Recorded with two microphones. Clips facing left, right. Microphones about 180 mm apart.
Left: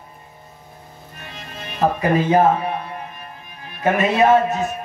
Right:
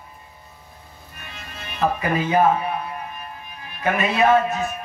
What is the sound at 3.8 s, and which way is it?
Speech, 40° left (ahead or behind).